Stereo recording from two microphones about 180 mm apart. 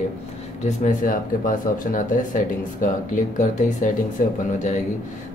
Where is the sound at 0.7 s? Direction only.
45° left (ahead or behind).